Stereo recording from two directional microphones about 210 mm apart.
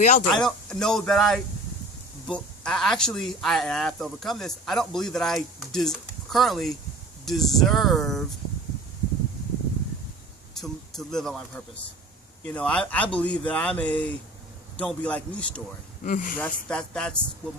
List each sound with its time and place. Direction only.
0.0 s speech: 35° left (ahead or behind)
0.3 s speech: centre (ahead or behind)
10.5 s speech: centre (ahead or behind)
16.0 s speech: 40° left (ahead or behind)
16.4 s speech: 5° left (ahead or behind)